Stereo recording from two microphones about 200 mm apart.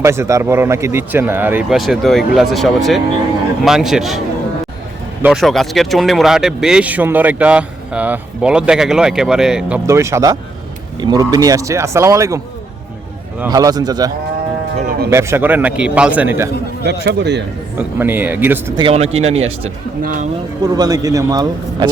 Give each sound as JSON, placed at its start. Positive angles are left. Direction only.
{"t": 0.0, "sound": "speech", "side_deg": -15}
{"t": 5.2, "sound": "speech", "side_deg": 0}
{"t": 13.5, "sound": "a man's voice", "side_deg": -20}
{"t": 15.1, "sound": "speech", "side_deg": -15}
{"t": 16.8, "sound": "speech", "side_deg": -55}
{"t": 17.7, "sound": "speech", "side_deg": -10}
{"t": 18.8, "sound": "speech", "side_deg": -30}
{"t": 20.0, "sound": "speech", "side_deg": -40}
{"t": 20.6, "sound": "a man's voice", "side_deg": -20}